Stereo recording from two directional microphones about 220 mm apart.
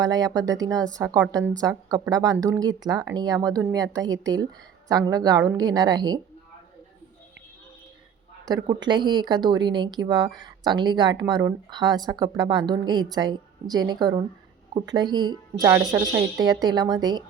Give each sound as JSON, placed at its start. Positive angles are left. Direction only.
{"t": 0.0, "sound": "a woman's voice", "side_deg": -15}
{"t": 8.6, "sound": "speech", "side_deg": -20}